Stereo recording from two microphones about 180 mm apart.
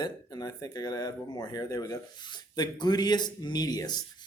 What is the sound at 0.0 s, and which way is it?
Speech, 20° left (ahead or behind).